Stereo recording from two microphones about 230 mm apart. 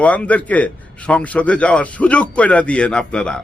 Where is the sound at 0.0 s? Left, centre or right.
Centre.